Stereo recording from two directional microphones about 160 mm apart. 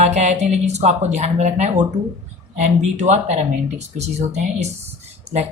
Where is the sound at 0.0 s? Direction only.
45° right (ahead or behind).